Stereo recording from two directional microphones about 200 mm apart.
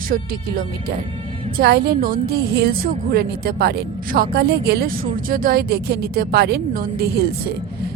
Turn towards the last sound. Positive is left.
turn(degrees=-50)  # may be behind; listen again after turning